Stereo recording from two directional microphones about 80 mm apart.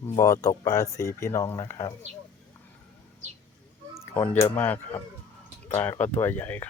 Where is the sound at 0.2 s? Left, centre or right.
Left.